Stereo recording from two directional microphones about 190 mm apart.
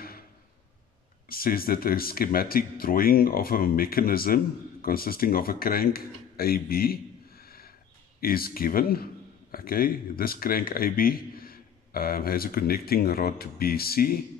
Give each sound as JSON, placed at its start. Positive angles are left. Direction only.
{"t": 1.3, "sound": "a man's voice", "side_deg": 50}